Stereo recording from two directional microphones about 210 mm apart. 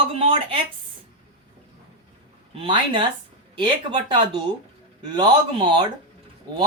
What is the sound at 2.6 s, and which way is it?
Speech, 25° right (ahead or behind).